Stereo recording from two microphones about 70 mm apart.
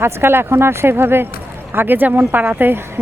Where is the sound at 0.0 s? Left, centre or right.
Right.